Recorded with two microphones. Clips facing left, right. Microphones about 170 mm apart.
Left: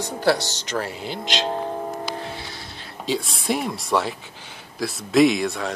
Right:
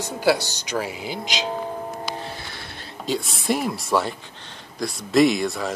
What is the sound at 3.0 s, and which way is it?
Speech, centre (ahead or behind).